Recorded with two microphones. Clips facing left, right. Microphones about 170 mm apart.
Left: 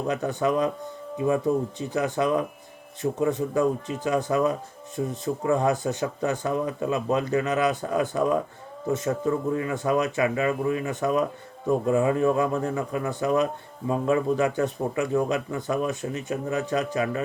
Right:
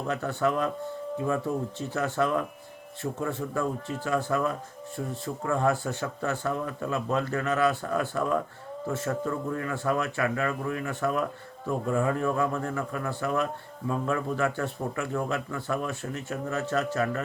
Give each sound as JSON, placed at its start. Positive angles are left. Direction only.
{"t": 0.1, "sound": "speech", "side_deg": 15}
{"t": 1.8, "sound": "speech", "side_deg": 15}